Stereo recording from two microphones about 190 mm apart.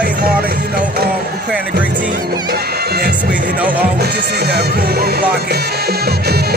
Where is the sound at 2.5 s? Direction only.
55° right (ahead or behind).